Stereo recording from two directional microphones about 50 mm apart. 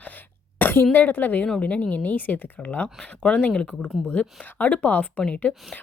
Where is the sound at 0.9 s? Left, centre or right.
Left.